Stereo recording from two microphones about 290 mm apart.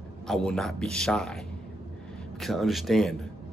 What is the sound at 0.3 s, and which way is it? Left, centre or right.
Speech, centre.